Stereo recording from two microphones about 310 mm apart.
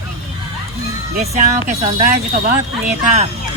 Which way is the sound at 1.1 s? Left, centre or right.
Right.